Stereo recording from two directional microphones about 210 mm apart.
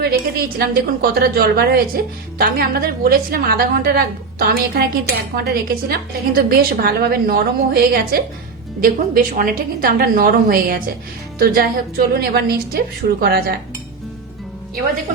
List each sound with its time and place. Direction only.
0.0 s a woman's voice: 45° right (ahead or behind)